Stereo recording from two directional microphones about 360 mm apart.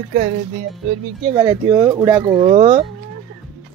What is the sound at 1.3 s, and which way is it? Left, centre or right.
Speech, centre.